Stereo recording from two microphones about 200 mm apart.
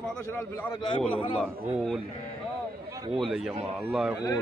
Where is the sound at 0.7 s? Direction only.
25° left (ahead or behind).